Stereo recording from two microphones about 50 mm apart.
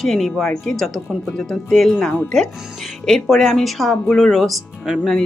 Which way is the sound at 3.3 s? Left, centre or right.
Centre.